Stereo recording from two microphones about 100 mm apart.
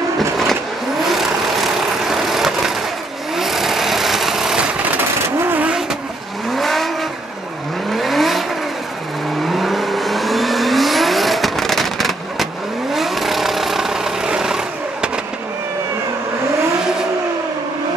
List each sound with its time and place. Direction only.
1.0 s vehicle: centre (ahead or behind)
5.5 s vehicle: 15° right (ahead or behind)
6.5 s vehicle: centre (ahead or behind)
7.9 s vehicle: centre (ahead or behind)